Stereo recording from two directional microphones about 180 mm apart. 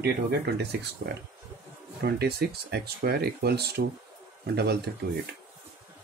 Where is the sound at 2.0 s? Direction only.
60° right (ahead or behind).